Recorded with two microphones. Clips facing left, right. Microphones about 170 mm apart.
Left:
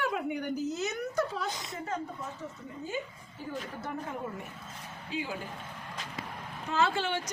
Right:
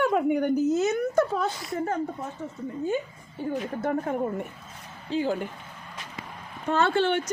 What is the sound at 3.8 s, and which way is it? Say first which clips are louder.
Speech: right 12 dB; 55° right (ahead or behind).